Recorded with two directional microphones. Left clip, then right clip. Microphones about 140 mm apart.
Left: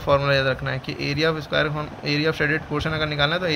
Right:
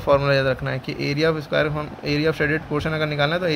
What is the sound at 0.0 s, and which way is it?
Speech, 30° right (ahead or behind).